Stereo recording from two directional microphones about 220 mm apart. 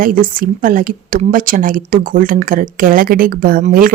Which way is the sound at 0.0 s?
40° right (ahead or behind).